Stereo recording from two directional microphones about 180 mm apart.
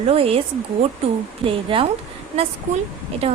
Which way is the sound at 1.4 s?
30° right (ahead or behind).